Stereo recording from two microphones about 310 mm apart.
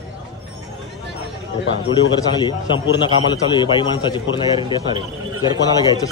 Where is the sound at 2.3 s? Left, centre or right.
Centre.